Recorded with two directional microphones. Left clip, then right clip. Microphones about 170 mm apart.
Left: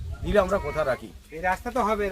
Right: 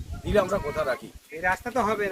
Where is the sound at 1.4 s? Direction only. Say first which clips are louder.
Even; 45° right (ahead or behind).